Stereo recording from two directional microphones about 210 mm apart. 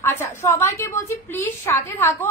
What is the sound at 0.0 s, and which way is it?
A woman's voice, 10° left (ahead or behind).